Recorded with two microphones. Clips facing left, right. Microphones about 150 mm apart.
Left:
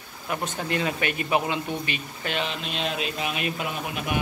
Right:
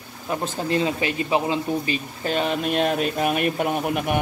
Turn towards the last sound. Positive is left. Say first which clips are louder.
# right 7 dB
turn(degrees=-50)  # may be behind; listen again after turning